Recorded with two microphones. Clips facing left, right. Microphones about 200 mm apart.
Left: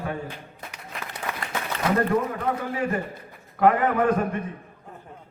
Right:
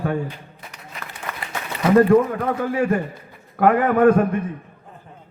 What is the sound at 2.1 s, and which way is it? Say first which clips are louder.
A man's voice: right 8 dB; 50° right (ahead or behind).